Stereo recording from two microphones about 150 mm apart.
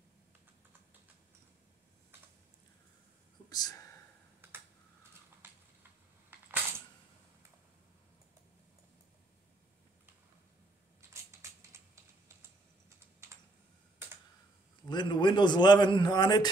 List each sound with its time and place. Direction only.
3.4 s whispering: 25° left (ahead or behind)
5.4 s a sound: 15° right (ahead or behind)
11.7 s typing: 20° right (ahead or behind)
14.9 s a man's voice: 30° left (ahead or behind)